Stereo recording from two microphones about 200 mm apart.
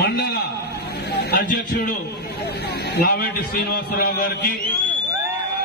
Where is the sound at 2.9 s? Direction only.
50° left (ahead or behind).